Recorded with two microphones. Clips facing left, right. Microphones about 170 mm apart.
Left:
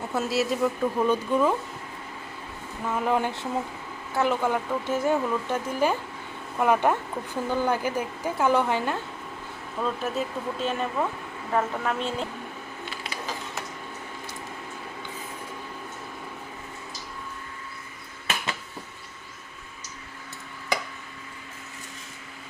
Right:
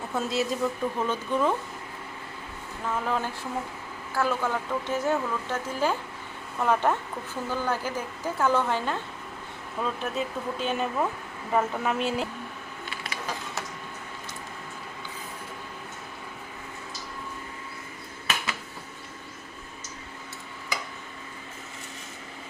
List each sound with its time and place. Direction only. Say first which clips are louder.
0.1 s speech: left 2 dB; 5° left (ahead or behind)
2.8 s speech: left 4 dB; 10° left (ahead or behind)
9.8 s speech: left 2 dB; centre (ahead or behind)